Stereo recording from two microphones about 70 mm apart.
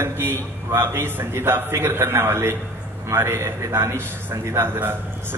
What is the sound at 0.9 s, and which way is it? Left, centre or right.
A man's voice, right.